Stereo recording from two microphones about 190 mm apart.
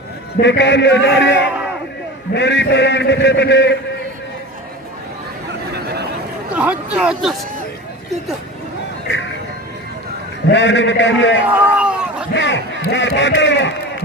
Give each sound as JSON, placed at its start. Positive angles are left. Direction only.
{"t": 0.3, "sound": "a man's voice", "side_deg": 70}
{"t": 5.7, "sound": "a sound", "side_deg": -60}
{"t": 6.6, "sound": "speech", "side_deg": -5}
{"t": 10.5, "sound": "a man's voice", "side_deg": 70}
{"t": 11.4, "sound": "a sound", "side_deg": -10}
{"t": 12.3, "sound": "a man's voice", "side_deg": 70}